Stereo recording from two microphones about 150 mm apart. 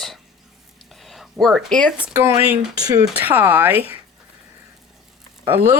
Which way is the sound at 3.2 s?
10° right (ahead or behind).